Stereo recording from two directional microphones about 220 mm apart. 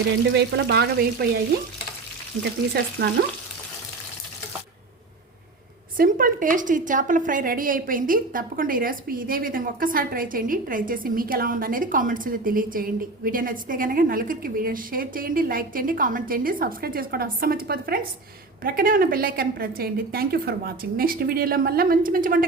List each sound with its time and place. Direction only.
0.3 s a woman's voice: 50° right (ahead or behind)
6.0 s a woman's voice: 40° right (ahead or behind)